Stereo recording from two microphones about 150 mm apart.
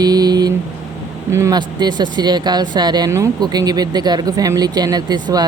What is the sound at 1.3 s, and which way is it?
Speech, 20° right (ahead or behind).